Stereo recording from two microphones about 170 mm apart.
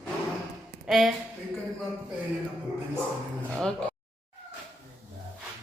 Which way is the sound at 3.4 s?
5° left (ahead or behind).